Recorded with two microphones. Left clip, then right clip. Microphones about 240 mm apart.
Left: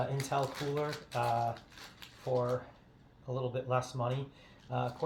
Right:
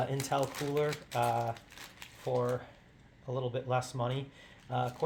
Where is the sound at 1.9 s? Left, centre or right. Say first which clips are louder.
Even; right.